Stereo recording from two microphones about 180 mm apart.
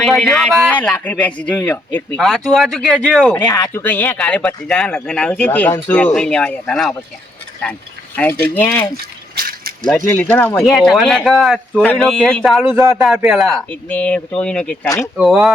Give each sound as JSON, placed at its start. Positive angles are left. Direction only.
{"t": 0.0, "sound": "speech", "side_deg": 0}
{"t": 2.1, "sound": "speech", "side_deg": 0}
{"t": 3.3, "sound": "speech", "side_deg": 15}
{"t": 9.3, "sound": "mechanisms", "side_deg": -55}
{"t": 10.1, "sound": "speech", "side_deg": 10}
{"t": 12.6, "sound": "speech", "side_deg": -15}
{"t": 12.9, "sound": "speech", "side_deg": 0}
{"t": 14.8, "sound": "speech", "side_deg": 15}
{"t": 15.1, "sound": "speech", "side_deg": 0}